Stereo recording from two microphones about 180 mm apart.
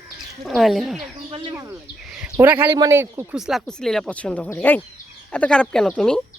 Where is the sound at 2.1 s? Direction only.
10° right (ahead or behind).